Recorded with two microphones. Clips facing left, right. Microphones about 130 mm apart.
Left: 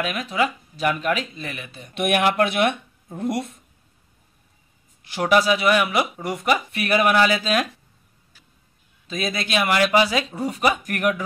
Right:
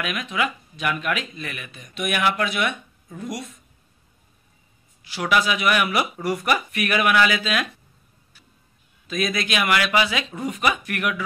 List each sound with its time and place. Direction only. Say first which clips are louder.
0.0 s speech: left 3 dB; 35° left (ahead or behind)
2.0 s speech: left 4 dB; 55° left (ahead or behind)
5.0 s speech: left 3 dB; 45° left (ahead or behind)
9.0 s speech: right 2 dB; 30° left (ahead or behind)